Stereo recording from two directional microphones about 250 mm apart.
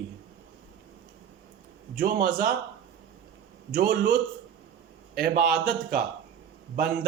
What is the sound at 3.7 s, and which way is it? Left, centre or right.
A man's voice, right.